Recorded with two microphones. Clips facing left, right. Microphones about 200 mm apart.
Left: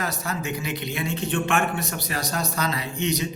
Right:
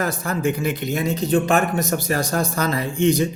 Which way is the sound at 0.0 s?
50° right (ahead or behind).